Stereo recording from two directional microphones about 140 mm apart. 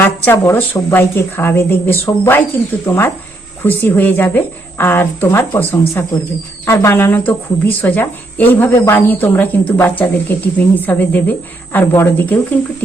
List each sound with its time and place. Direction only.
0.0 s speech: 15° left (ahead or behind)